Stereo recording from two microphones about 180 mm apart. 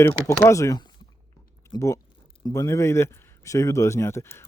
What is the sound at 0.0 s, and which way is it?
Speech, 15° left (ahead or behind).